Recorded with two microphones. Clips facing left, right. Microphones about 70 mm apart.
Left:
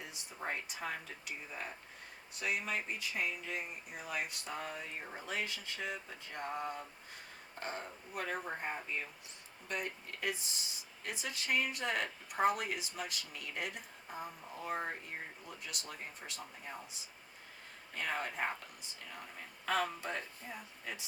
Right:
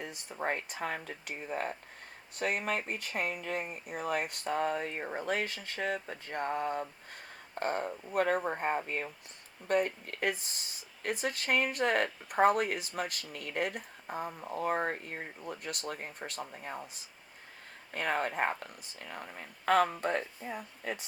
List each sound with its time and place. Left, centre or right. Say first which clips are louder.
0.0 s speech: right 7 dB; right
17.9 s speech: right 6 dB; right